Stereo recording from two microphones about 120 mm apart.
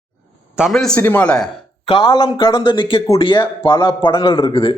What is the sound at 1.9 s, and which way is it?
A man's voice, 35° left (ahead or behind).